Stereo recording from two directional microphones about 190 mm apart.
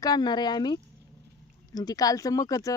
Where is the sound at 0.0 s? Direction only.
20° left (ahead or behind).